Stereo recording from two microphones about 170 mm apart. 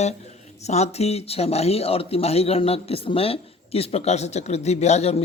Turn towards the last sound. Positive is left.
turn(degrees=40)  # may be behind; listen again after turning